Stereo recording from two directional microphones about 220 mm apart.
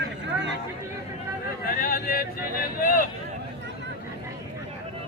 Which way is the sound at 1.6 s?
40° left (ahead or behind).